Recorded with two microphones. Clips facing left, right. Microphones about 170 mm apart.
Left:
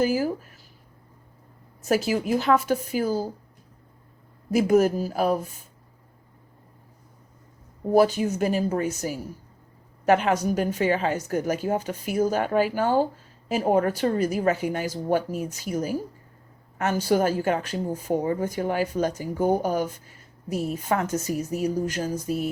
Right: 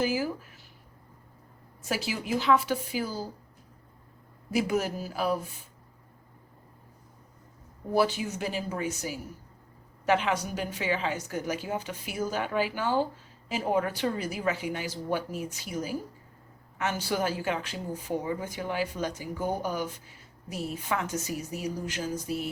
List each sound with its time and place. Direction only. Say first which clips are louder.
0.0 s speech: left 5 dB; 45° left (ahead or behind)
1.8 s a woman's voice: left 9 dB; 45° left (ahead or behind)
4.5 s a woman's voice: left 8 dB; 45° left (ahead or behind)
7.9 s a woman's voice: left 7 dB; 45° left (ahead or behind)
10.1 s a woman's voice: left 6 dB; 45° left (ahead or behind)